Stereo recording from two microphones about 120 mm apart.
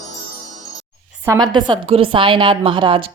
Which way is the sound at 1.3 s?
35° right (ahead or behind).